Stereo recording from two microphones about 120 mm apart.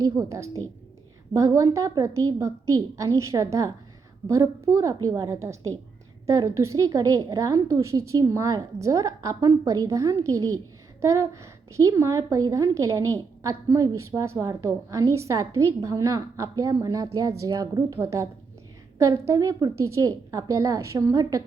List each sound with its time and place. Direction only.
0.0 s a woman's voice: 30° right (ahead or behind)